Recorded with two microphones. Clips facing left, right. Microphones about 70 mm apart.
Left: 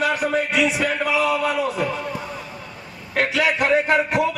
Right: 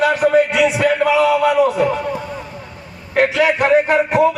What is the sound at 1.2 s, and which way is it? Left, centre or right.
Speech, right.